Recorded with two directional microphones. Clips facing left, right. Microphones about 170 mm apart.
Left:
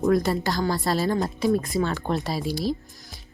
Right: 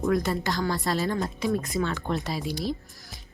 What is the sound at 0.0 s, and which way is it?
A woman's voice, 35° left (ahead or behind).